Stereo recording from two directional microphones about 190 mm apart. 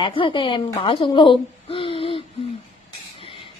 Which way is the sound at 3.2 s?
25° left (ahead or behind).